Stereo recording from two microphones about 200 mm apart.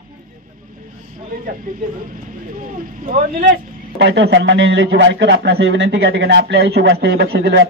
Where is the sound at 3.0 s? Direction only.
45° right (ahead or behind).